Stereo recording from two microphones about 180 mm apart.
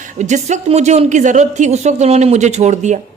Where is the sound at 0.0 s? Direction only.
45° right (ahead or behind).